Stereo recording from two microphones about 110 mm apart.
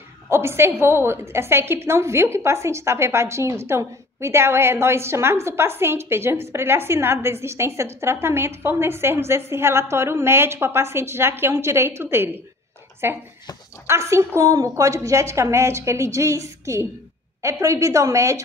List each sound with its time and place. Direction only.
0.3 s a woman's voice: 25° right (ahead or behind)